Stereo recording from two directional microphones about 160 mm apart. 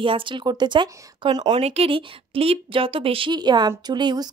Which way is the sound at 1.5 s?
40° right (ahead or behind).